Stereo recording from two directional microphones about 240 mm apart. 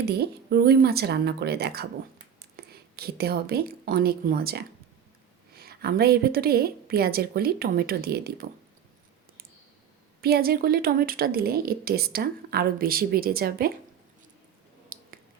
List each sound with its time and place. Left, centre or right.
0.0 s a woman's voice: right
10.2 s a woman's voice: right
14.9 s a sound: right